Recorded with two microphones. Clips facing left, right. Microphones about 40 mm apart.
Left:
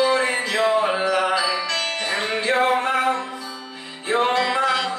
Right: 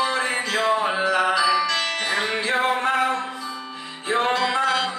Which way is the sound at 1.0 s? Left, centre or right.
Centre.